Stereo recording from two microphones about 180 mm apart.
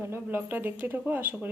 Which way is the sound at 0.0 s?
10° right (ahead or behind).